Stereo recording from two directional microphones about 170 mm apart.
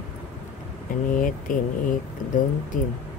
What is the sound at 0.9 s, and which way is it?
Speech, 50° left (ahead or behind).